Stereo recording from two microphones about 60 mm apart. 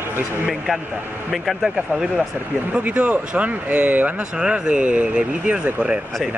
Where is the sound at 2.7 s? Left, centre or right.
Right.